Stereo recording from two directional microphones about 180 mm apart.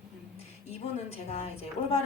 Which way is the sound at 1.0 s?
35° left (ahead or behind).